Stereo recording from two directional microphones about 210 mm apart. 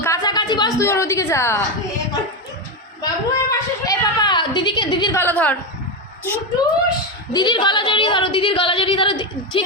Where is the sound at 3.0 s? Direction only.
15° left (ahead or behind).